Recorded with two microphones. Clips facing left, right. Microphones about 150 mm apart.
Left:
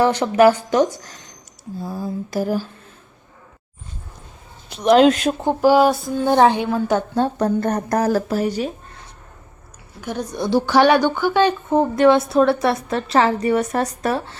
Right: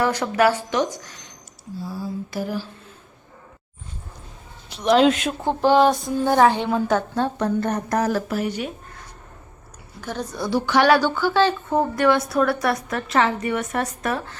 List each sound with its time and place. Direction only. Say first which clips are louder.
0.0 s a woman's voice: left 5 dB; 30° left (ahead or behind)
1.8 s a sound: left 3 dB; 50° left (ahead or behind)
4.7 s a sound: left 4 dB; 50° left (ahead or behind)
5.4 s speech: left 2 dB; 10° left (ahead or behind)
6.2 s a woman's voice: left 2 dB; 20° left (ahead or behind)
6.6 s speech: left 1 dB; 10° left (ahead or behind)
7.2 s speech: left 3 dB; 40° left (ahead or behind)
10.0 s a woman's voice: left 3 dB; 15° left (ahead or behind); by 14.3 s 30° left (ahead or behind)